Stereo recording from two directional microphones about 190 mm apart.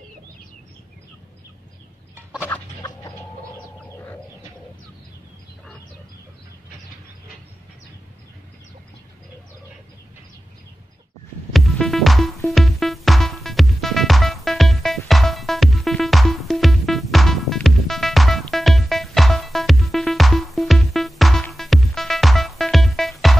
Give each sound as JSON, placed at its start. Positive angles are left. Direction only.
{"t": 2.5, "sound": "chicken", "side_deg": 15}
{"t": 11.5, "sound": "music", "side_deg": 0}